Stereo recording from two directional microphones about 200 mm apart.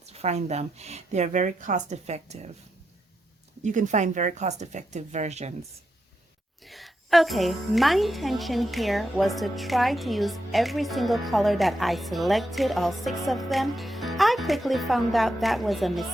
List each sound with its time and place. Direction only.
0.0 s speech: 35° right (ahead or behind)
3.6 s speech: 35° right (ahead or behind)
6.7 s a woman's voice: centre (ahead or behind)